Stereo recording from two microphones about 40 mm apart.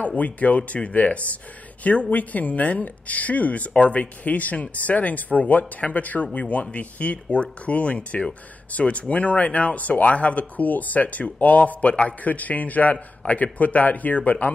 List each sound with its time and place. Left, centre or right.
0.0 s speech: left
11.9 s a man's voice: left
12.2 s speech: left